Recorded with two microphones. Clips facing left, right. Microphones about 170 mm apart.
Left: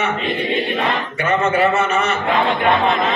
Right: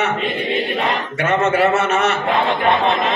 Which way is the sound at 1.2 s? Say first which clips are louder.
Right 1 dB; 75° right (ahead or behind).